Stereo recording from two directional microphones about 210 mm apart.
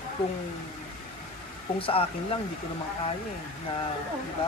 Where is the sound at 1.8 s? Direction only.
25° left (ahead or behind).